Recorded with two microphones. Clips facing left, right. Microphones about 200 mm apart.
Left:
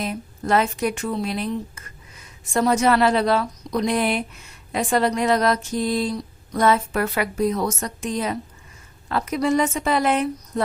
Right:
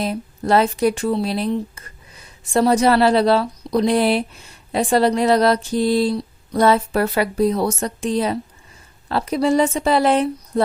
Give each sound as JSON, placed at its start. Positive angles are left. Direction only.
{"t": 0.0, "sound": "a woman's voice", "side_deg": -35}